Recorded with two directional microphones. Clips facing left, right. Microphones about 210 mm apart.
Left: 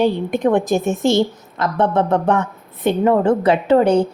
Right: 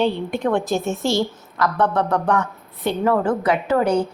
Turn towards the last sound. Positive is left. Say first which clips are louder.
# left 5 dB
turn(degrees=30)  # may be behind; listen again after turning